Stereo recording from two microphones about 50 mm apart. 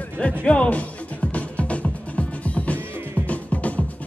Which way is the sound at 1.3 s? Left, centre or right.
Left.